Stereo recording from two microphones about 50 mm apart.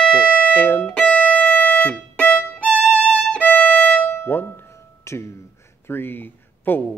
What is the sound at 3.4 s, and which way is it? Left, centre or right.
Music, left.